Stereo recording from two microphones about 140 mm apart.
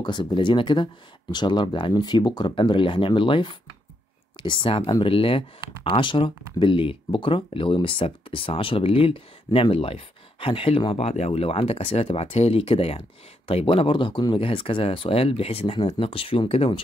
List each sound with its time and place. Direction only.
0.0 s speech: 35° left (ahead or behind)